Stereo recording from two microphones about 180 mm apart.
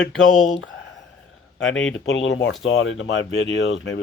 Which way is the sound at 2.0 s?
85° left.